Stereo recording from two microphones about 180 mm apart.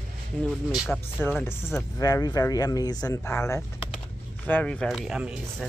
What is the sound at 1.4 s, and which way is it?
Speech, 15° left (ahead or behind).